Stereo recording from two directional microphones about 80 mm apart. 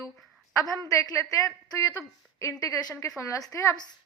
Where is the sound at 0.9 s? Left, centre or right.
Left.